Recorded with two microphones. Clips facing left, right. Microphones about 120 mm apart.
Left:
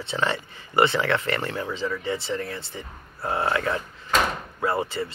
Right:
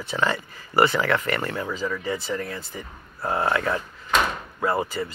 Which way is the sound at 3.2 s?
30° right (ahead or behind).